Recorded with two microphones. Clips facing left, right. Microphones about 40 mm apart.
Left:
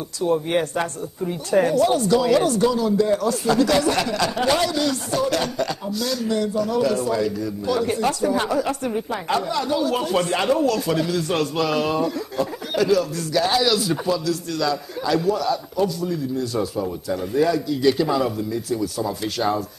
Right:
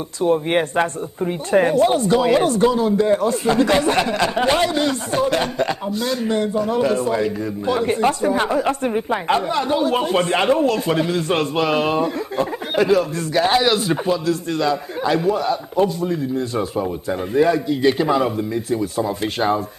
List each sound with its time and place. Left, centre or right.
0.2 s speech: right